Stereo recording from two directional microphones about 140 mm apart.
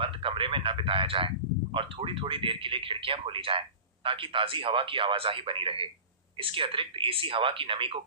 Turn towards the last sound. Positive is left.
turn(degrees=-40)  # may be behind; listen again after turning